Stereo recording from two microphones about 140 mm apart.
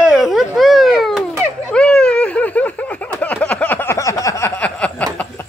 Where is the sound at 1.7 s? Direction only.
5° left (ahead or behind); by 4.5 s 20° left (ahead or behind).